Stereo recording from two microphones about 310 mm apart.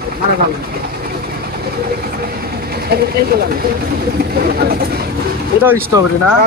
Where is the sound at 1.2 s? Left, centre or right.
Right.